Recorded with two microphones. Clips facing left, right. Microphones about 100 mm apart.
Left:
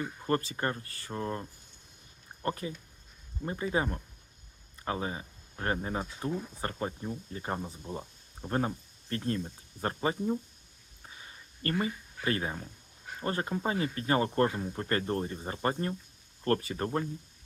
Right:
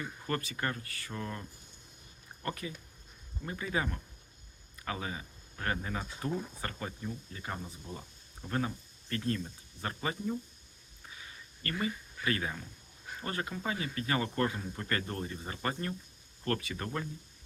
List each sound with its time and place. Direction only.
0.0 s speech: 30° left (ahead or behind)